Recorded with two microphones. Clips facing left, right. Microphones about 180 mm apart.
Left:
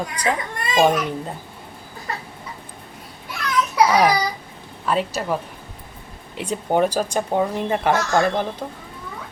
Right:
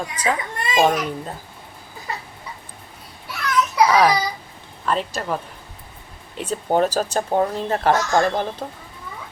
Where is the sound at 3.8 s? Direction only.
15° left (ahead or behind).